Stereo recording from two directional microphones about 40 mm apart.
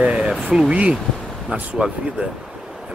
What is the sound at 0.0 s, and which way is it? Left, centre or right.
Speech, right.